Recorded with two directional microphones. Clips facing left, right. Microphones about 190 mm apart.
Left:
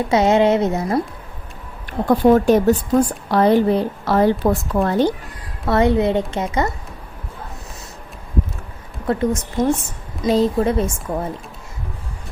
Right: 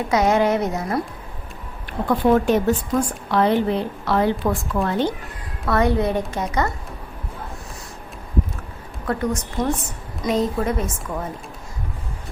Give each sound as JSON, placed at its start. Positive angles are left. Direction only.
{"t": 0.1, "sound": "a woman's voice", "side_deg": 25}
{"t": 2.0, "sound": "a woman's voice", "side_deg": 40}
{"t": 5.6, "sound": "a woman's voice", "side_deg": 25}
{"t": 9.0, "sound": "a woman's voice", "side_deg": 25}